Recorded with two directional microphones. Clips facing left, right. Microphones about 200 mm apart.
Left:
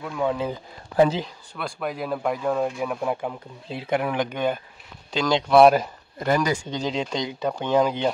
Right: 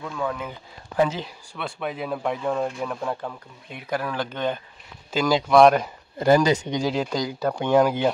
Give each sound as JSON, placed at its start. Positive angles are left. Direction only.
{"t": 0.0, "sound": "speech", "side_deg": 15}
{"t": 0.5, "sound": "speech", "side_deg": 35}
{"t": 1.5, "sound": "speech", "side_deg": 0}
{"t": 3.6, "sound": "speech", "side_deg": 30}
{"t": 5.1, "sound": "speech", "side_deg": -5}
{"t": 6.1, "sound": "speech", "side_deg": -30}